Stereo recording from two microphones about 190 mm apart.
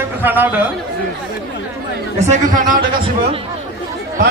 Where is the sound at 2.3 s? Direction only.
45° right (ahead or behind).